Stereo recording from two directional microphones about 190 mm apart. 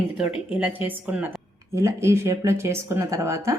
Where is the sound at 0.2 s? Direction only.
5° right (ahead or behind).